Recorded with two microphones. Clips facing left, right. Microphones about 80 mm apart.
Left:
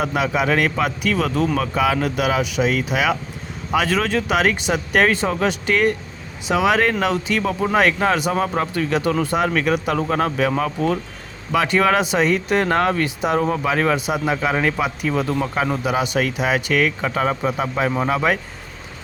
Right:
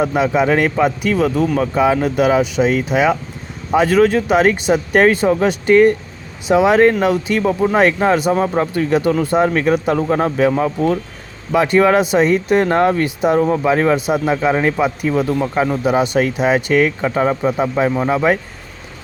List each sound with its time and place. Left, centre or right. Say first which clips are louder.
0.0 s speech: right 5 dB; right
11.5 s speech: right 5 dB; right
13.4 s speech: right 5 dB; centre
13.7 s speech: right 5 dB; centre
15.8 s speech: right 5 dB; right